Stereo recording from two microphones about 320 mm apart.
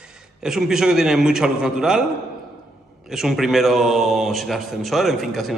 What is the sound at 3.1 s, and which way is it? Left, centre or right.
A man's voice, centre.